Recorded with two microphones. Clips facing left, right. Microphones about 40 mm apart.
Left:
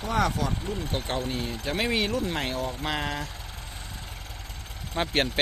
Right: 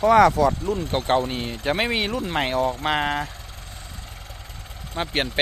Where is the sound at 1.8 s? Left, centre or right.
Centre.